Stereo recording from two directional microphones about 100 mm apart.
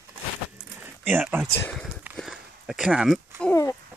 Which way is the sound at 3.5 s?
35° left (ahead or behind).